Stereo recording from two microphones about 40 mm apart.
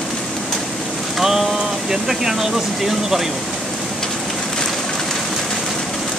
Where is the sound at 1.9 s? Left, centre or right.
Centre.